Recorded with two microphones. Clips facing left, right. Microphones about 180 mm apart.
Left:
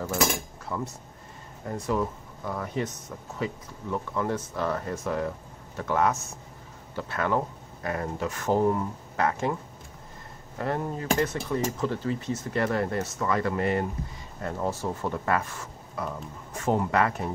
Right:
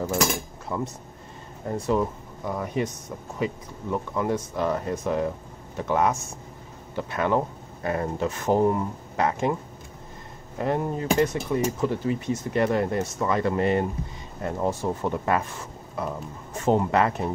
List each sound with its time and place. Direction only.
0.7 s speech: 20° right (ahead or behind)
10.6 s speech: 20° right (ahead or behind)